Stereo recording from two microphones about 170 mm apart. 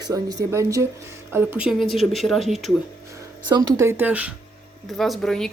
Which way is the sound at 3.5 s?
20° right (ahead or behind).